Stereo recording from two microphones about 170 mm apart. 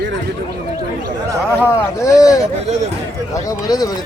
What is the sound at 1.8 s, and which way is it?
Speech, 15° left (ahead or behind).